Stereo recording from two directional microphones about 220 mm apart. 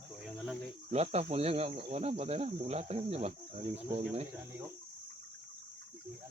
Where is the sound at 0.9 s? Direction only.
30° right (ahead or behind).